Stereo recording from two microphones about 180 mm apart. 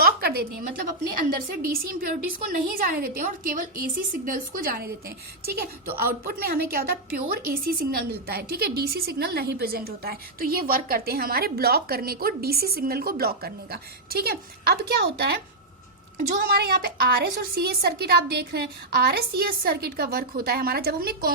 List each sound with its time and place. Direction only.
0.0 s a sound: 55° right (ahead or behind)
1.5 s a woman's voice: 55° right (ahead or behind)
16.1 s a woman's voice: 55° right (ahead or behind)